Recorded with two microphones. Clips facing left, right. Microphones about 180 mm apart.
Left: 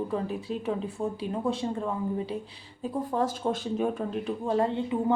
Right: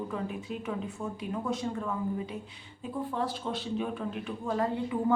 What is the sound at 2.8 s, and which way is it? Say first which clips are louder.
Speech: left 5 dB; 40° left (ahead or behind).